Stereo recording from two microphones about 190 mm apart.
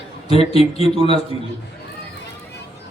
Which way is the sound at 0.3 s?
30° left (ahead or behind).